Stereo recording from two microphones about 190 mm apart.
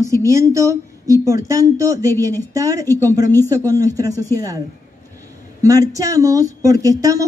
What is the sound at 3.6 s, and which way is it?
Speech, 20° right (ahead or behind).